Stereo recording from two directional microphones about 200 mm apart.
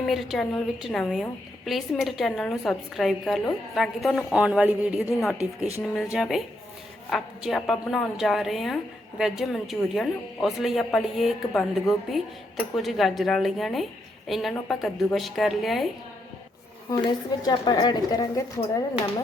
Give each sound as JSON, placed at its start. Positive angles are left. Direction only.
{"t": 0.0, "sound": "a woman's voice", "side_deg": 0}
{"t": 17.0, "sound": "a woman's voice", "side_deg": 20}